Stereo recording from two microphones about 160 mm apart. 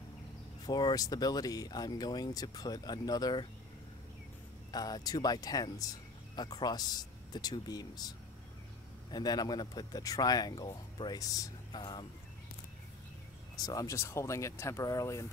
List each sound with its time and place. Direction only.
0.7 s speech: 25° left (ahead or behind)
4.6 s speech: 25° left (ahead or behind)
9.1 s speech: 25° left (ahead or behind)
13.6 s speech: 25° left (ahead or behind)